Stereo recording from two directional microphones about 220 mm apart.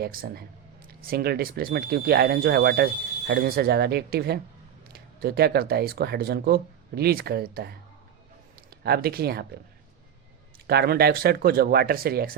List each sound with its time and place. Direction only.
0.0 s speech: 45° right (ahead or behind)
10.7 s speech: 45° right (ahead or behind)